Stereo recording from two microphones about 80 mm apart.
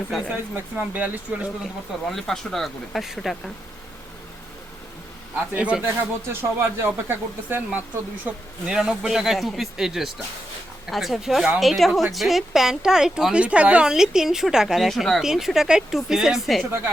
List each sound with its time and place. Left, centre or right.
0.1 s a woman's voice: centre
0.5 s speech: right
2.0 s a woman's voice: centre
5.5 s speech: centre
5.8 s speech: right
8.2 s a woman's voice: centre